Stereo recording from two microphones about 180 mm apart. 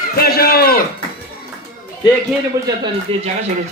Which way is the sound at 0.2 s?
55° left (ahead or behind).